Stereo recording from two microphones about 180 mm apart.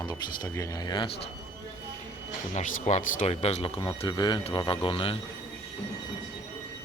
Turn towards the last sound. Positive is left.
turn(degrees=30)  # may be behind; listen again after turning